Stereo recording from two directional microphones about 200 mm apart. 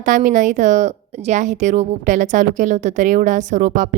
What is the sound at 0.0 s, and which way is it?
A woman's voice, 40° right (ahead or behind).